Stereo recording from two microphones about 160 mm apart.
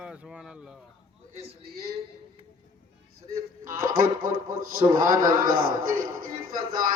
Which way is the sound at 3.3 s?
65° right (ahead or behind).